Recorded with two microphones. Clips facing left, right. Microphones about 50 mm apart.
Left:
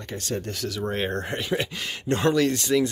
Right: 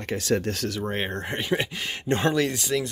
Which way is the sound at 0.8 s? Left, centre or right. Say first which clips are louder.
Left 5 dB; right.